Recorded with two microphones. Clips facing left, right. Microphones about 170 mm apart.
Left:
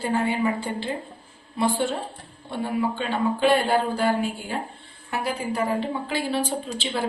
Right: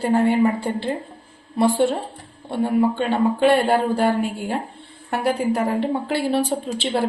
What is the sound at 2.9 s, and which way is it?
A woman's voice, 60° right (ahead or behind).